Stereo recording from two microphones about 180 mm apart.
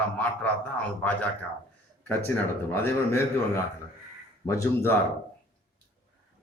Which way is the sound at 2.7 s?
15° left (ahead or behind).